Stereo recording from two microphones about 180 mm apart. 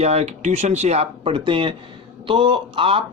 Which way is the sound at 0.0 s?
35° right (ahead or behind).